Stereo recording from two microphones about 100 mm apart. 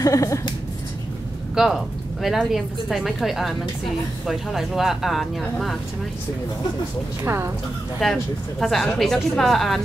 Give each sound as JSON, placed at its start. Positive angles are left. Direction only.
{"t": 0.0, "sound": "speech", "side_deg": 30}
{"t": 1.5, "sound": "speech", "side_deg": -5}
{"t": 7.2, "sound": "speech", "side_deg": -25}
{"t": 8.0, "sound": "speech", "side_deg": 5}